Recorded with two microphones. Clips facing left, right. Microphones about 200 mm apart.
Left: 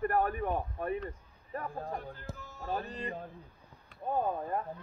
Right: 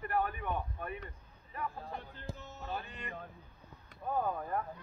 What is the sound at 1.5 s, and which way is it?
Speech, 45° left (ahead or behind).